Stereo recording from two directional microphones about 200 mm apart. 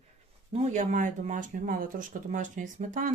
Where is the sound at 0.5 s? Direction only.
40° right (ahead or behind).